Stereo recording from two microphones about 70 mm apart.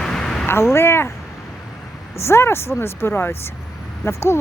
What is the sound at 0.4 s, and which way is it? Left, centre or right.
Speech, left.